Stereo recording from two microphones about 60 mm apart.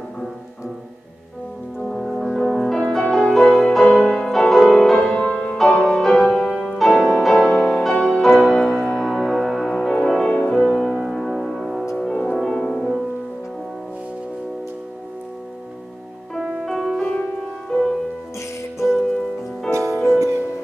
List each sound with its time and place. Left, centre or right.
1.8 s music: centre
4.0 s music: centre
4.3 s music: centre
6.5 s music: centre
6.8 s music: centre
8.2 s music: centre
10.6 s music: centre
12.0 s music: centre
16.3 s music: centre
17.0 s music: centre
19.9 s music: centre